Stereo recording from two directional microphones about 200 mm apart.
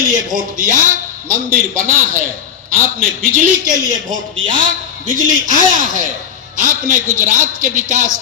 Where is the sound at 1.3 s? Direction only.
45° right (ahead or behind).